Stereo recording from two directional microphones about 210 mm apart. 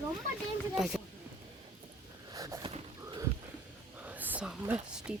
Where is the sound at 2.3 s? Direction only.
15° right (ahead or behind).